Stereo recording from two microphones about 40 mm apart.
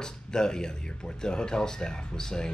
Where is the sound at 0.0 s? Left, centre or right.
Centre.